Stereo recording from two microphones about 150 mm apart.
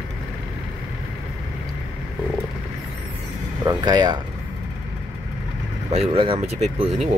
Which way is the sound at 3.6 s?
30° right (ahead or behind).